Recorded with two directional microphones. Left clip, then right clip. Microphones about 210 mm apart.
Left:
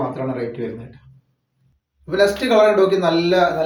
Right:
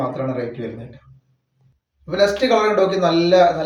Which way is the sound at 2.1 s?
15° right (ahead or behind).